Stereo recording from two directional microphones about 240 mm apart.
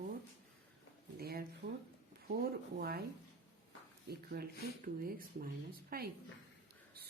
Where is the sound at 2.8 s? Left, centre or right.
Right.